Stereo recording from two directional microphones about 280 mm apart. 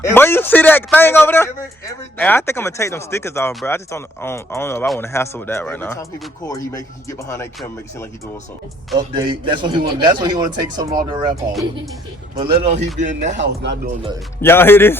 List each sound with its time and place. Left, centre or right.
0.1 s speech: centre
7.3 s speech: centre
9.0 s a man's voice: centre
13.4 s speech: right
14.4 s speech: centre